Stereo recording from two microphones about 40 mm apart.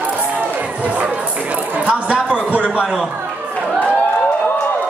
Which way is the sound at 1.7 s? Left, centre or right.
Right.